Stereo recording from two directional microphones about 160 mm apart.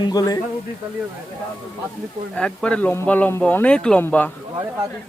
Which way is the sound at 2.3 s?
5° left (ahead or behind).